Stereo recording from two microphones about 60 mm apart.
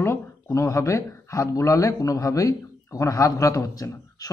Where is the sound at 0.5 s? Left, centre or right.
Left.